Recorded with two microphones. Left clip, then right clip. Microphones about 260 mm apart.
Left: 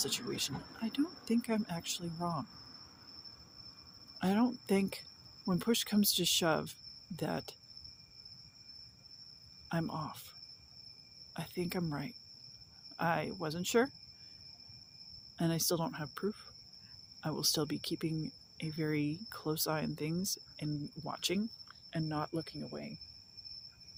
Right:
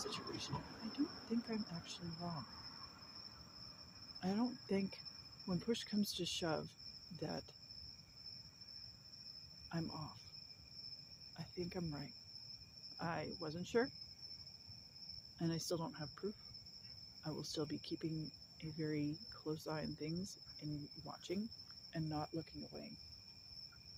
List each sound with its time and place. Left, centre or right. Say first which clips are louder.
0.0 s speech: left 9 dB; left
4.2 s speech: left 9 dB; left
9.6 s speech: left 9 dB; left
11.3 s speech: left 8 dB; left
15.4 s speech: left 8 dB; left